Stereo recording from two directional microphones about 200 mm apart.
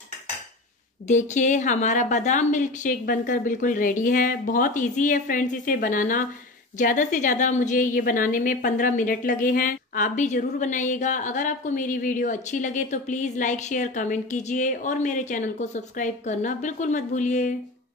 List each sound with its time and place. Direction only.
1.0 s a woman's voice: 35° left (ahead or behind)